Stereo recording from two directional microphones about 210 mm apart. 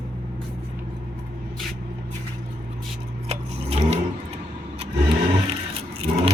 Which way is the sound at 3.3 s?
30° right (ahead or behind).